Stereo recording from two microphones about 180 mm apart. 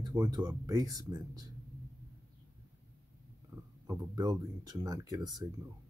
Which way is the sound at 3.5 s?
20° right (ahead or behind).